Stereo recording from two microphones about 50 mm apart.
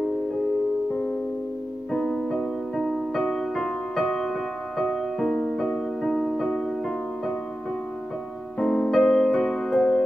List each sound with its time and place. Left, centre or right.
1.9 s music: centre
8.5 s music: centre